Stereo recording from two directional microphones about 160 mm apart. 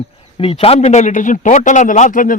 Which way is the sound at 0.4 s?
35° left (ahead or behind).